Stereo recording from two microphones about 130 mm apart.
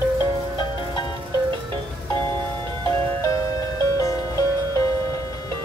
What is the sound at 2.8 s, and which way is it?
Music, 25° left (ahead or behind).